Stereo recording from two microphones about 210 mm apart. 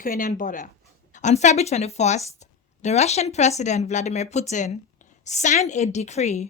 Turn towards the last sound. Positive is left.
turn(degrees=35)  # may be behind; listen again after turning